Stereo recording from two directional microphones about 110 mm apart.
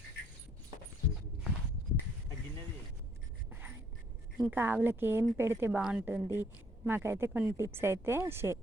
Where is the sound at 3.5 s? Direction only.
15° right (ahead or behind).